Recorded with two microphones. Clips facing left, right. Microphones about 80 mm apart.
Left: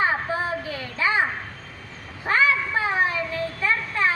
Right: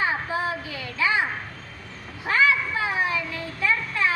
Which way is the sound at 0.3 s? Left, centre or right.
Left.